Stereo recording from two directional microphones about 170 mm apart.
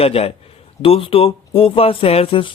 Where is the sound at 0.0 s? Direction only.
35° left (ahead or behind).